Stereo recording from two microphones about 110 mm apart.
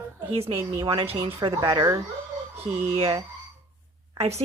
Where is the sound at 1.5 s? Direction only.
40° right (ahead or behind).